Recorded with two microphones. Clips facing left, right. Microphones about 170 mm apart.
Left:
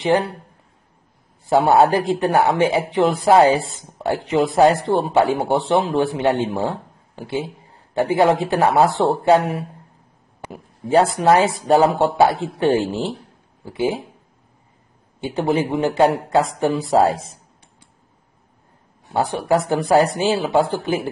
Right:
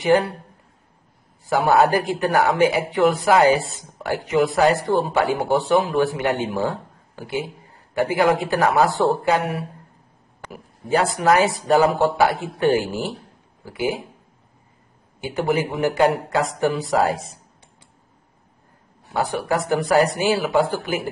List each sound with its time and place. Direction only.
1.4 s speech: 25° left (ahead or behind)
15.1 s speech: 25° left (ahead or behind)
19.1 s speech: 25° left (ahead or behind)